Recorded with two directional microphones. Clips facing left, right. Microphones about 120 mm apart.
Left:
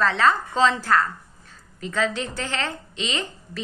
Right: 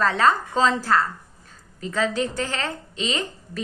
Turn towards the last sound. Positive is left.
turn(degrees=-40)  # may be behind; listen again after turning